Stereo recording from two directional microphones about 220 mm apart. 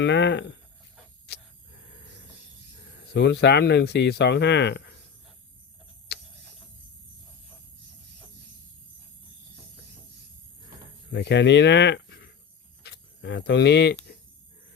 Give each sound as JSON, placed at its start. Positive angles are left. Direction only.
{"t": 0.0, "sound": "speech", "side_deg": 50}
{"t": 1.3, "sound": "a sound", "side_deg": 50}
{"t": 3.0, "sound": "speech", "side_deg": 50}
{"t": 6.1, "sound": "clock", "side_deg": 45}
{"t": 11.1, "sound": "speech", "side_deg": 50}
{"t": 12.8, "sound": "a sound", "side_deg": 50}